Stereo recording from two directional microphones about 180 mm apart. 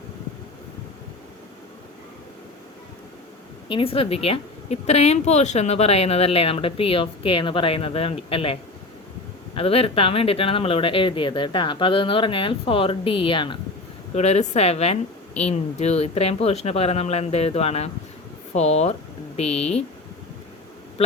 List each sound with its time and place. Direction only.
3.7 s speech: 30° left (ahead or behind)
9.6 s speech: 30° left (ahead or behind)
14.2 s speech: 40° left (ahead or behind)